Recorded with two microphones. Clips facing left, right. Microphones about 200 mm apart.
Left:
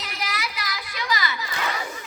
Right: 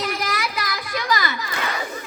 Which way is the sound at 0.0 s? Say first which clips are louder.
Right 7 dB; 50° right (ahead or behind).